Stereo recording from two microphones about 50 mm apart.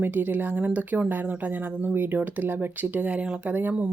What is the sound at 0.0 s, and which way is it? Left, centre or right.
Speech, right.